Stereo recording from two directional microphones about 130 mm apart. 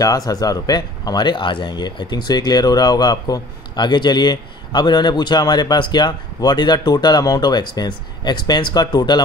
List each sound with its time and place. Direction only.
0.0 s speech: 30° left (ahead or behind)